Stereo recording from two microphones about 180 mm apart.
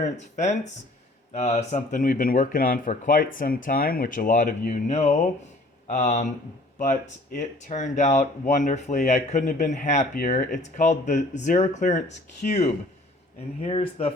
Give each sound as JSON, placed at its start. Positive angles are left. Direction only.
{"t": 0.0, "sound": "speech", "side_deg": 40}